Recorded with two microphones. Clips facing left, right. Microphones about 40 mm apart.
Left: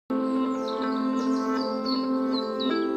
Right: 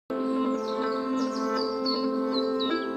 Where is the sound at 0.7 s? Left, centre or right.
Left.